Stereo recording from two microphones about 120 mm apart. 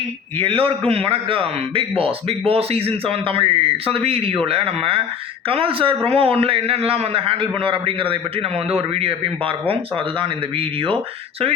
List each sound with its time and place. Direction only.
0.3 s a man's voice: 55° right (ahead or behind)